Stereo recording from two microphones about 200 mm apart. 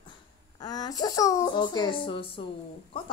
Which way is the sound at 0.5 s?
20° left (ahead or behind).